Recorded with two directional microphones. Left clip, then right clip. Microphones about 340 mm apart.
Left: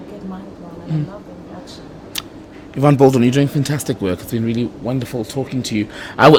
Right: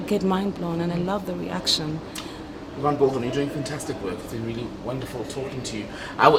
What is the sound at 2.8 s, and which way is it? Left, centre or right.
Speech, left.